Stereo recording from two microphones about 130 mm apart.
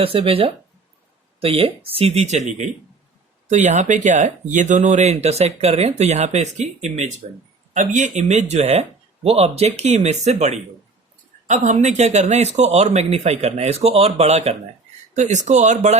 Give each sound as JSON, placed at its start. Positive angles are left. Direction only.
{"t": 0.0, "sound": "speech", "side_deg": -45}
{"t": 7.7, "sound": "speech", "side_deg": -70}
{"t": 15.1, "sound": "speech", "side_deg": -65}